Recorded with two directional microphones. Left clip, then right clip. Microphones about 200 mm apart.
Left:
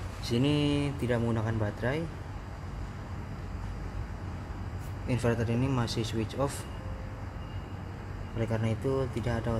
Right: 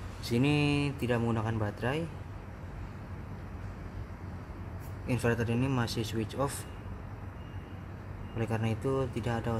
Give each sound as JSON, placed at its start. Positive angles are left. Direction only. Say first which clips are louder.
{"t": 0.2, "sound": "speech", "louder": "even", "side_deg": -15}
{"t": 5.0, "sound": "speech", "louder": "left 1 dB", "side_deg": -10}
{"t": 8.4, "sound": "speech", "louder": "left 1 dB", "side_deg": -15}